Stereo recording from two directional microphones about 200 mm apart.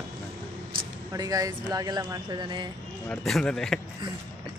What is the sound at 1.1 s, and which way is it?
Speech, 20° right (ahead or behind).